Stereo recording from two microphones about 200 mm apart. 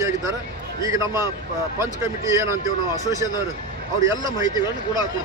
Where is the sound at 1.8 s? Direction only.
15° right (ahead or behind).